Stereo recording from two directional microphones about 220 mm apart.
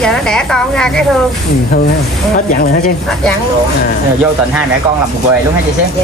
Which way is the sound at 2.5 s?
35° left (ahead or behind).